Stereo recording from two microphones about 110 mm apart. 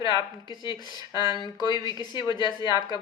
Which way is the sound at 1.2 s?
45° left (ahead or behind).